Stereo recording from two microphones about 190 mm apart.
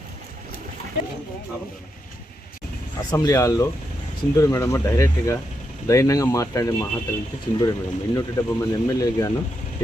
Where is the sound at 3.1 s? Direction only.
15° left (ahead or behind).